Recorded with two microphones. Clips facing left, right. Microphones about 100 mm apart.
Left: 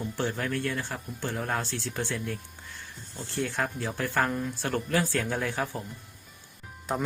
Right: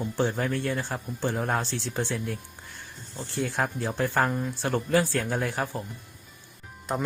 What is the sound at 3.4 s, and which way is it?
Speech, 10° right (ahead or behind).